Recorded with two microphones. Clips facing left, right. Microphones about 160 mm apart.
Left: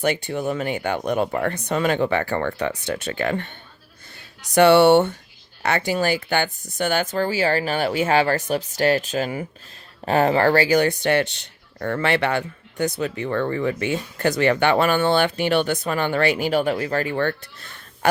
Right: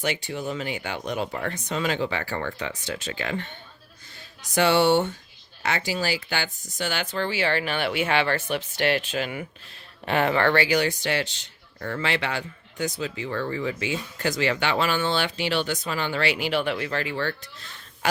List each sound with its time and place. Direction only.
0.0 s speech: 55° left (ahead or behind)
4.5 s speech: 60° left (ahead or behind)